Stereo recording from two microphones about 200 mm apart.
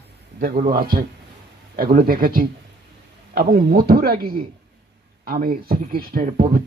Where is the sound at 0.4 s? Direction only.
50° right (ahead or behind).